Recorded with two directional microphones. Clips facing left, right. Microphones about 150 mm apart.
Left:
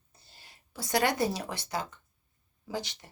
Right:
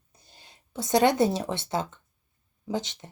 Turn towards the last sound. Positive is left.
turn(degrees=-20)  # may be behind; listen again after turning